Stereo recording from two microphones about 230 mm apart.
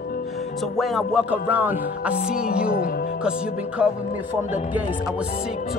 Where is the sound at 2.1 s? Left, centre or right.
Left.